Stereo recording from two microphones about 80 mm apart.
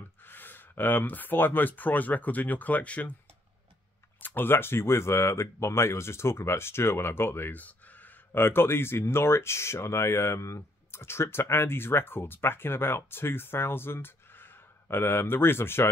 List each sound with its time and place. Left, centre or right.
0.2 s speech: left
4.2 s speech: left